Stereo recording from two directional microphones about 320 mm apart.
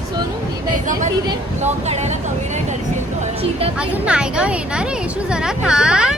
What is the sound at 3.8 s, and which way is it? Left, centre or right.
Speech, centre.